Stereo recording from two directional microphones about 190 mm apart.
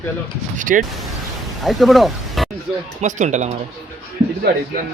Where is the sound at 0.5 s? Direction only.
45° right (ahead or behind).